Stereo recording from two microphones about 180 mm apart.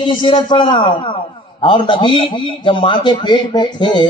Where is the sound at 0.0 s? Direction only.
25° left (ahead or behind).